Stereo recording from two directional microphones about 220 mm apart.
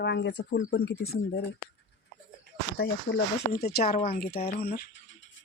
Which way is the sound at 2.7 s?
45° left (ahead or behind).